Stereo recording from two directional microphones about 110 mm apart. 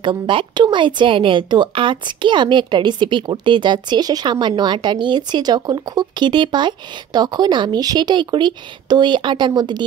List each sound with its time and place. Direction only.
0.0 s a woman's voice: 50° right (ahead or behind)